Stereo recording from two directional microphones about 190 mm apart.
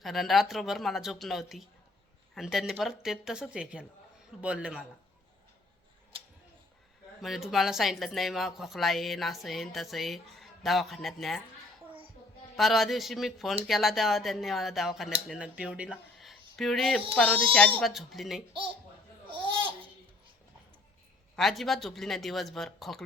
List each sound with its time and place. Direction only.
0.0 s speech: centre (ahead or behind)
7.2 s speech: centre (ahead or behind)
12.5 s speech: centre (ahead or behind)
19.3 s babbling: 25° right (ahead or behind)
21.3 s speech: centre (ahead or behind)